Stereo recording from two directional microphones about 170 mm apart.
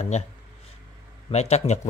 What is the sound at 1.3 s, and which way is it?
Speech, 40° left (ahead or behind).